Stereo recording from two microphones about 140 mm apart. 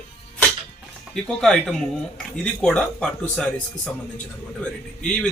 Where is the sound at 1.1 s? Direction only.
5° left (ahead or behind).